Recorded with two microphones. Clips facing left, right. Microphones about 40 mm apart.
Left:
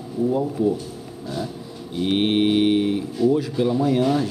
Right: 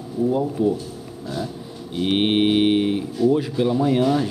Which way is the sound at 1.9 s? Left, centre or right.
Right.